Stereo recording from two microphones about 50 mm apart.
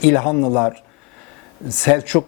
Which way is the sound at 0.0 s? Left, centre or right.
Centre.